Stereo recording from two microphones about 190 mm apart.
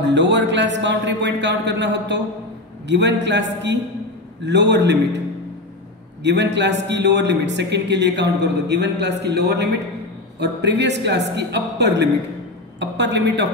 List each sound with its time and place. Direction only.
0.0 s a man's voice: 70° right (ahead or behind)
6.2 s a man's voice: 65° right (ahead or behind)